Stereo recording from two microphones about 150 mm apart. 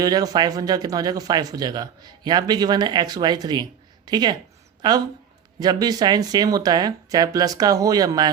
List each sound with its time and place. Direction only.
0.0 s speech: 25° right (ahead or behind)